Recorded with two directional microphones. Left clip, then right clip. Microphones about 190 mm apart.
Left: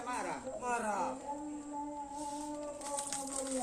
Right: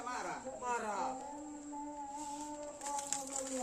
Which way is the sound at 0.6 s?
50° left (ahead or behind).